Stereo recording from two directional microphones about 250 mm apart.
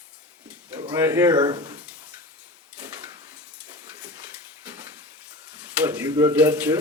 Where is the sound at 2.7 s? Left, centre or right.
Centre.